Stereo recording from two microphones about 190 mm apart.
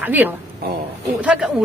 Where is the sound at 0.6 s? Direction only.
55° right (ahead or behind).